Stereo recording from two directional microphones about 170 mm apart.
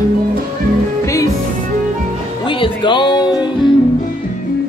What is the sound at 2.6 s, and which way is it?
Music, 25° left (ahead or behind).